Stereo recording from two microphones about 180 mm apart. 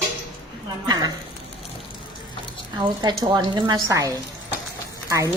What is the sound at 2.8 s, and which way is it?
Speech, 25° right (ahead or behind).